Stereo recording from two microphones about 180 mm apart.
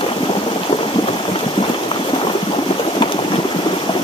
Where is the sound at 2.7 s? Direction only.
30° left (ahead or behind).